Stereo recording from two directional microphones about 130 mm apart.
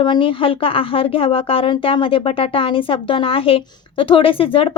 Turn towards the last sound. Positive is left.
turn(degrees=45)  # may be behind; listen again after turning